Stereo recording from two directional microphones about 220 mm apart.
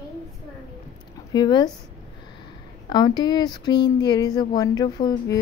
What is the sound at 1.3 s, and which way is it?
Speech, 20° left (ahead or behind).